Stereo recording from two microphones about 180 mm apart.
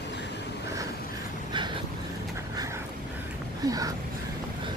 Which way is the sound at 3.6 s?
20° right (ahead or behind).